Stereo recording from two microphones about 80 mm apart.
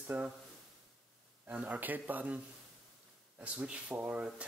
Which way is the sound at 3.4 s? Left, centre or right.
Centre.